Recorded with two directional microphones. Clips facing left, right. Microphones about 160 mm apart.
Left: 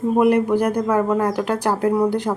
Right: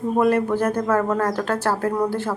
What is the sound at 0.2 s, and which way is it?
A woman's voice, 15° left (ahead or behind).